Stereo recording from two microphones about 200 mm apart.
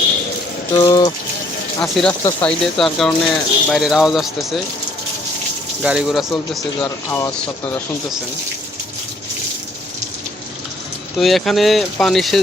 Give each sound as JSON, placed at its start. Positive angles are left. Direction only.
{"t": 0.9, "sound": "speech", "side_deg": 20}
{"t": 1.8, "sound": "speech", "side_deg": 5}
{"t": 5.8, "sound": "speech", "side_deg": -5}
{"t": 6.6, "sound": "speech", "side_deg": 15}
{"t": 11.2, "sound": "speech", "side_deg": 0}